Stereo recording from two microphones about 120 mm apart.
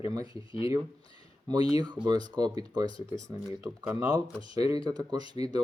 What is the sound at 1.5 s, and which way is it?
Speech, 35° right (ahead or behind).